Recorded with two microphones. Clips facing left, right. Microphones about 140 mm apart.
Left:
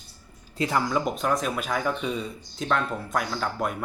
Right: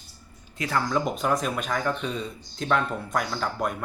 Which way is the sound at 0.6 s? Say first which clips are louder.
Left 2 dB; 20° left (ahead or behind).